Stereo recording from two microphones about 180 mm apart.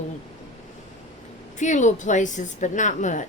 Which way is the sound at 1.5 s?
45° left (ahead or behind).